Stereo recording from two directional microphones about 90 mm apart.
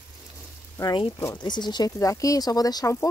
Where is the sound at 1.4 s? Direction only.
55° left (ahead or behind).